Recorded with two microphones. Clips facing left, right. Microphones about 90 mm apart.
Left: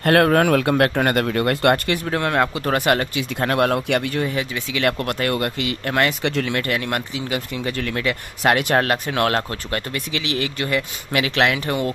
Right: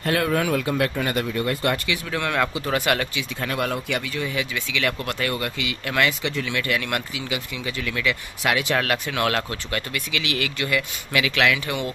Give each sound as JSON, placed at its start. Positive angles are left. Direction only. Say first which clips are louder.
{"t": 0.0, "sound": "a man's voice", "louder": "left 7 dB", "side_deg": 60}
{"t": 2.0, "sound": "speech", "louder": "left 4 dB", "side_deg": 40}
{"t": 3.3, "sound": "a man's voice", "louder": "left 7 dB", "side_deg": 60}
{"t": 4.4, "sound": "speech", "louder": "left 3 dB", "side_deg": 45}
{"t": 8.8, "sound": "speech", "louder": "left 3 dB", "side_deg": 40}